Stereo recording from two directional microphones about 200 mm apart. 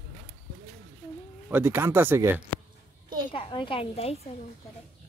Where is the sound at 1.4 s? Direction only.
10° right (ahead or behind).